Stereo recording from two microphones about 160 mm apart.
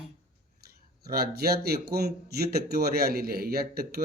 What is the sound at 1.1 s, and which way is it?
Speech, 75° right (ahead or behind).